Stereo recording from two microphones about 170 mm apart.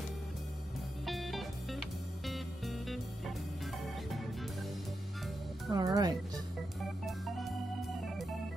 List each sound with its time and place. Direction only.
1.0 s music: centre (ahead or behind)
5.7 s speech: 20° right (ahead or behind)
6.8 s organ: centre (ahead or behind)